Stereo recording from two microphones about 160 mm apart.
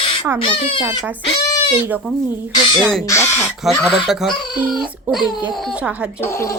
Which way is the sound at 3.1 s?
15° left (ahead or behind).